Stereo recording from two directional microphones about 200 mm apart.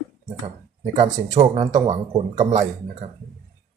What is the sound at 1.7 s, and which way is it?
Speech, 35° right (ahead or behind).